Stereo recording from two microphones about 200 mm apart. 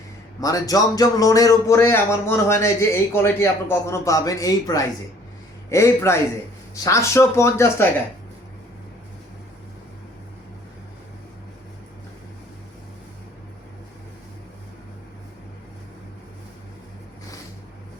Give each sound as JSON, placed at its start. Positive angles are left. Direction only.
{"t": 0.3, "sound": "speech", "side_deg": 20}